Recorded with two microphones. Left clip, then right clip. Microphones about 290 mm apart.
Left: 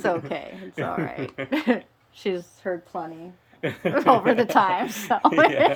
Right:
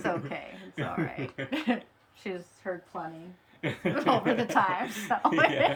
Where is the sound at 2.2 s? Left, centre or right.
Left.